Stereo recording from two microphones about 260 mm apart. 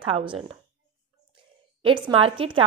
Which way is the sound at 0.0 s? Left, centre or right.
Centre.